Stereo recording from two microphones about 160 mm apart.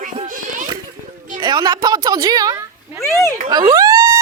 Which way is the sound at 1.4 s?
25° right (ahead or behind).